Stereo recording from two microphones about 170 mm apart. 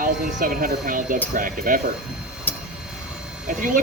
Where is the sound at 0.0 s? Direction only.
55° right (ahead or behind).